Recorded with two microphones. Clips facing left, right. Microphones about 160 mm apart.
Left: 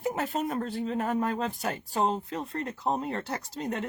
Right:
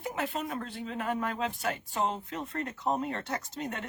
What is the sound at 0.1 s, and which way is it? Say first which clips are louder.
A woman's voice: left 2 dB; 40° left (ahead or behind).